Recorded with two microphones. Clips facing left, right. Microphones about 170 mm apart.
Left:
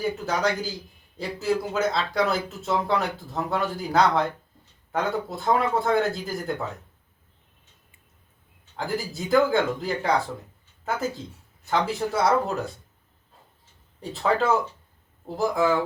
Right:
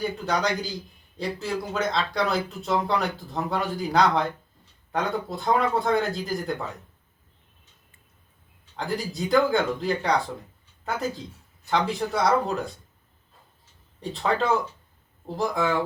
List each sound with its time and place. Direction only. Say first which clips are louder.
0.3 s speech: right 1 dB; 5° left (ahead or behind)
8.7 s speech: even; centre (ahead or behind)
14.0 s speech: left 2 dB; 5° left (ahead or behind)